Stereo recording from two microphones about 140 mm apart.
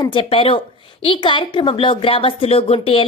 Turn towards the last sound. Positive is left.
turn(degrees=40)  # may be behind; listen again after turning